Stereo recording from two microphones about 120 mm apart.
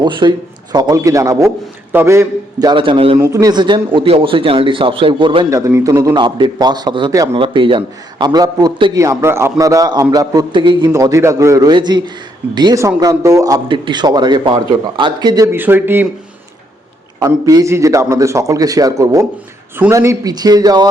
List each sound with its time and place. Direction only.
0.0 s a man's voice: 40° right (ahead or behind); by 2.2 s 20° right (ahead or behind)
2.6 s a man's voice: 40° right (ahead or behind)
3.2 s a man's voice: 25° right (ahead or behind)
3.9 s a man's voice: 50° right (ahead or behind)
5.5 s a man's voice: 25° right (ahead or behind)
6.1 s a man's voice: 40° right (ahead or behind)
10.9 s a man's voice: 25° right (ahead or behind)
13.0 s a man's voice: 25° right (ahead or behind)
13.7 s a man's voice: 40° right (ahead or behind)
15.5 s speech: 15° right (ahead or behind)
17.2 s a man's voice: 30° right (ahead or behind)